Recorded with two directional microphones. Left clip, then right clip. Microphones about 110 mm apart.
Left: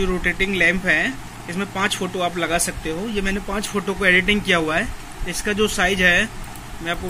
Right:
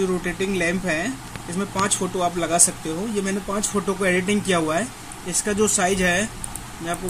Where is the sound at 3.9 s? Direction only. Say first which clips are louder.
Left 6 dB; 65° right (ahead or behind).